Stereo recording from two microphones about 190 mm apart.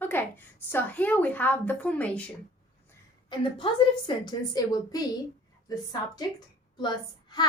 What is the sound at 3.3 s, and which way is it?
A woman's voice, 25° left (ahead or behind).